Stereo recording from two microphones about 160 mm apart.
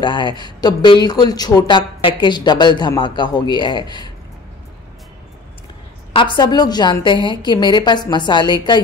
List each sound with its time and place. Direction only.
0.0 s a woman's voice: 30° left (ahead or behind)
6.1 s a woman's voice: 30° left (ahead or behind)